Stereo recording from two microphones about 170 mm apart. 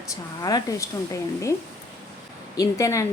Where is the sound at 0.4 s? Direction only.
20° left (ahead or behind).